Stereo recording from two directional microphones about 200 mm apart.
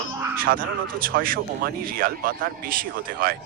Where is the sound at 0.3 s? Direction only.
45° right (ahead or behind).